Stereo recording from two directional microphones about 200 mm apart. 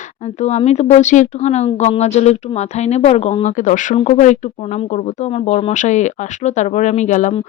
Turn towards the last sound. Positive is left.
turn(degrees=40)  # may be behind; listen again after turning